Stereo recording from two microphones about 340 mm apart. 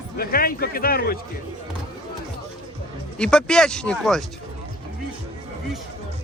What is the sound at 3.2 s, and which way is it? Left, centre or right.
Speech, centre.